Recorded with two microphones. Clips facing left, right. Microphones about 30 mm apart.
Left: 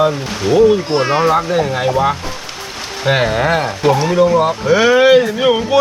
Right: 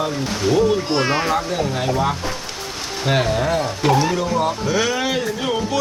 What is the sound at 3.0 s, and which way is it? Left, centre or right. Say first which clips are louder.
Speech: left 5 dB; left.